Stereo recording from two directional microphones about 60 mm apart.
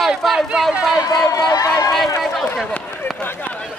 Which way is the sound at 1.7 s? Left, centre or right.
Left.